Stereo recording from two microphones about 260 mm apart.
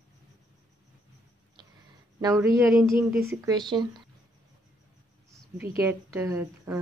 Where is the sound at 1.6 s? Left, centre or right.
Centre.